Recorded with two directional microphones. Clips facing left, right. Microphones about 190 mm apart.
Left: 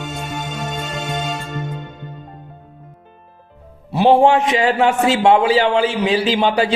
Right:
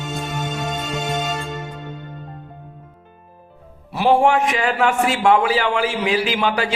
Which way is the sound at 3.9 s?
25° left (ahead or behind).